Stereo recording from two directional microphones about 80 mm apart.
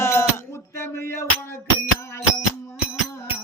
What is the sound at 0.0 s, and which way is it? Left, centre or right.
Music, left.